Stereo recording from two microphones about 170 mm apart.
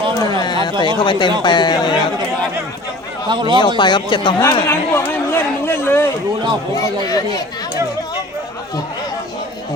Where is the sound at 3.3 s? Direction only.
25° right (ahead or behind).